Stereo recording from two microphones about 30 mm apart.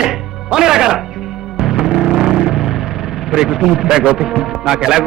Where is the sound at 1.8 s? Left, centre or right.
Centre.